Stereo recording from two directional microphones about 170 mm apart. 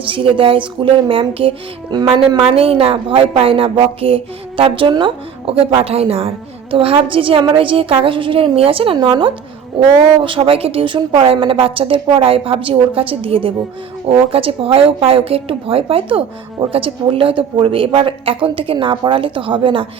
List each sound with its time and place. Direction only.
0.1 s a woman's voice: 30° right (ahead or behind)